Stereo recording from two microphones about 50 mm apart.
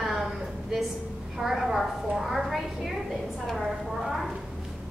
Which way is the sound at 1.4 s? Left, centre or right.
Centre.